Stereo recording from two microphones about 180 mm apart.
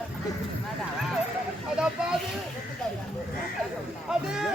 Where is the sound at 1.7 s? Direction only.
5° right (ahead or behind).